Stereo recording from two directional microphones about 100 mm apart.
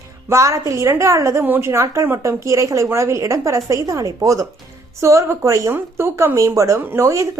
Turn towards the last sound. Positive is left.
turn(degrees=-30)  # may be behind; listen again after turning